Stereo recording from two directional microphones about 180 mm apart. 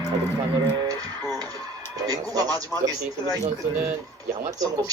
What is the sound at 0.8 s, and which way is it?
Speech, 20° right (ahead or behind).